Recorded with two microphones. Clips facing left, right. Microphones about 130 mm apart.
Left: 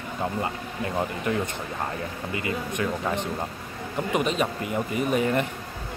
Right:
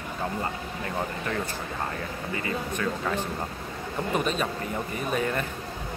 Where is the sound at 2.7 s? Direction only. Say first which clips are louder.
Left 2 dB; 20° left (ahead or behind).